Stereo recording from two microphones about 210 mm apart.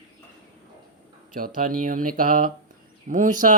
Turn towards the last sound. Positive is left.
turn(degrees=-40)  # may be behind; listen again after turning